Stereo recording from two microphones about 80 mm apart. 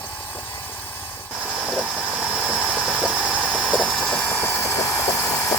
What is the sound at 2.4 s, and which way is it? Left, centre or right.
Engine, centre.